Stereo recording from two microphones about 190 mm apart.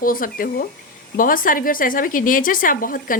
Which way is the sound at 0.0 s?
50° left (ahead or behind).